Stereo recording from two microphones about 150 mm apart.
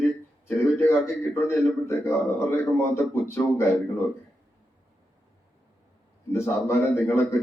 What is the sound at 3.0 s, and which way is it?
Speech, 15° left (ahead or behind).